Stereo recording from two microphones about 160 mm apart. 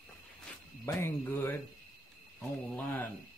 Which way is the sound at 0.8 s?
15° left (ahead or behind).